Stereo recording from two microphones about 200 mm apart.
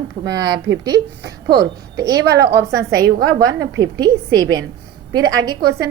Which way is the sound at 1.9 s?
15° right (ahead or behind).